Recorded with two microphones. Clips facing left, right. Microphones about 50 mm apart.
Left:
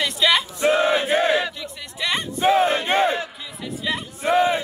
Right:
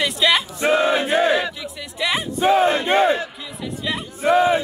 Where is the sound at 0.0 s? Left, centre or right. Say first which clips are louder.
Right 1 dB; centre.